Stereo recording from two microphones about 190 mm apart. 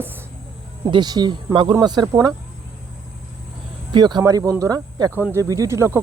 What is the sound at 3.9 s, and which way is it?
Speech, 25° right (ahead or behind).